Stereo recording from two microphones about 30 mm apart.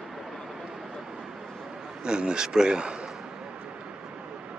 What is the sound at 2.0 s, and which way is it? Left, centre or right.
Speech, right.